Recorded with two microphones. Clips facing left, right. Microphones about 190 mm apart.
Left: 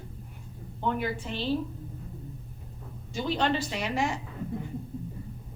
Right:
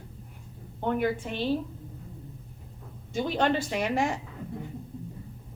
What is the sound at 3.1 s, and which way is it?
A woman's voice, 50° right (ahead or behind).